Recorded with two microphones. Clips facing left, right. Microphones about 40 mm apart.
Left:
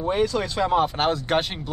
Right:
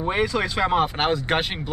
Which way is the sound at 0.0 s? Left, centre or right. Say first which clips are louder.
Even; right.